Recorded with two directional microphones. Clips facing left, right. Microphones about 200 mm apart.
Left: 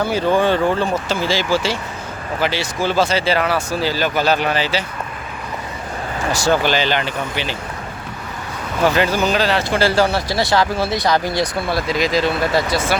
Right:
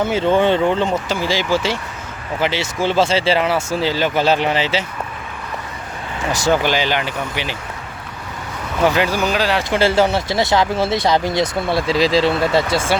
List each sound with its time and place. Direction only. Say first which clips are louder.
0.0 s speech: right 1 dB; 20° right (ahead or behind)
6.3 s speech: even; 20° right (ahead or behind)
8.8 s speech: even; 10° right (ahead or behind); by 13.0 s 30° right (ahead or behind)